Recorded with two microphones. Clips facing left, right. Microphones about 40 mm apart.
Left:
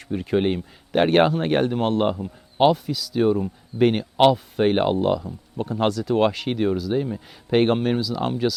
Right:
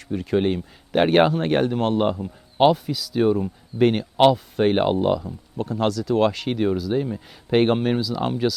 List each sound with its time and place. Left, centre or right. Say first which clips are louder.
0.0 s speech: even; centre
0.9 s speech: even; centre
5.5 s speech: even; centre
6.3 s speech: even; centre